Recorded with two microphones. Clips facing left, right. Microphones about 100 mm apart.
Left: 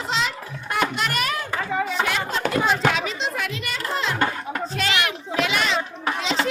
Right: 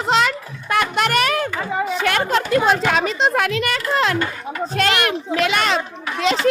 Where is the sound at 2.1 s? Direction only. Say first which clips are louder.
Right 6 dB; 65° right (ahead or behind).